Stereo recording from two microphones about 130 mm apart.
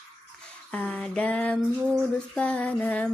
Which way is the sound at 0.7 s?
10° left (ahead or behind).